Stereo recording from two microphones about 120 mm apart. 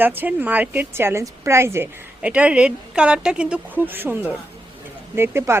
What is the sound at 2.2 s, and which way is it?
Speech, 10° right (ahead or behind).